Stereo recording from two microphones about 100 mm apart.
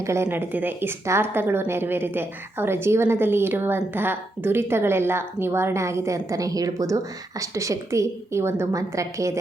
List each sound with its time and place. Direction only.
0.0 s a woman's voice: 25° right (ahead or behind)